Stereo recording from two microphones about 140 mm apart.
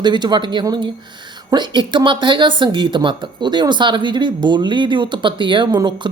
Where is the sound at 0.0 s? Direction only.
30° right (ahead or behind).